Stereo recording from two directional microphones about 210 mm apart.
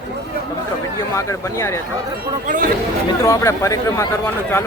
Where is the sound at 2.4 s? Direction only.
40° right (ahead or behind).